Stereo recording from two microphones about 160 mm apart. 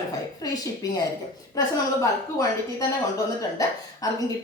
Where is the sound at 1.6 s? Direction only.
20° left (ahead or behind).